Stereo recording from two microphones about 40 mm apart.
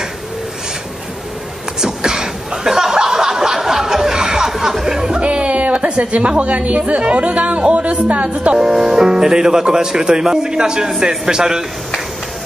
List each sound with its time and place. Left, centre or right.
1.8 s chuckle: centre
5.2 s a woman's voice: right
8.5 s speech: centre